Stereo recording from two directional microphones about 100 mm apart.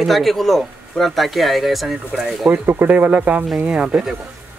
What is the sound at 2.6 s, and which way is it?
Speech, 20° right (ahead or behind).